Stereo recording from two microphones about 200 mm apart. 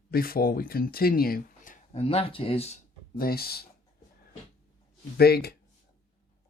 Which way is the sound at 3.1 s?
50° left (ahead or behind).